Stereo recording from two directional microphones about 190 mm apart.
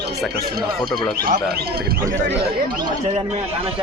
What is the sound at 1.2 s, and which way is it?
Speech, 50° right (ahead or behind).